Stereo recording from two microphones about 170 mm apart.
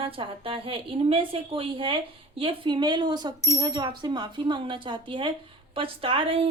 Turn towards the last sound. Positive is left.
turn(degrees=-30)  # may be behind; listen again after turning